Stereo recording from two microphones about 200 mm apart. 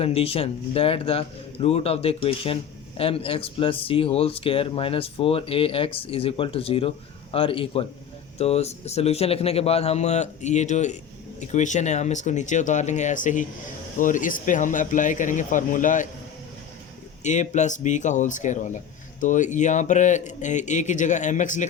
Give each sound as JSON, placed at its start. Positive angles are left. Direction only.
{"t": 0.0, "sound": "speech", "side_deg": 30}
{"t": 17.2, "sound": "speech", "side_deg": 35}